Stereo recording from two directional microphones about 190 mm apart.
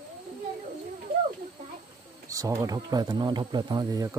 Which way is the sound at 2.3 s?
15° right (ahead or behind).